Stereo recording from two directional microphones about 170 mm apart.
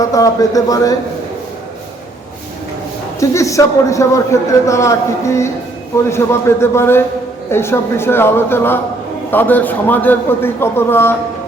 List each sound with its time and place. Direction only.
0.0 s speech: 20° left (ahead or behind)
3.2 s a man's voice: 20° left (ahead or behind)